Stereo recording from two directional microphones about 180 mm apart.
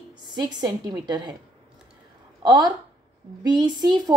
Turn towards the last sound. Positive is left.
turn(degrees=-25)  # may be behind; listen again after turning